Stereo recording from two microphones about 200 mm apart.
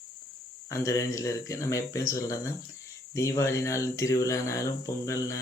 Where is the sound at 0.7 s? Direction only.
15° left (ahead or behind).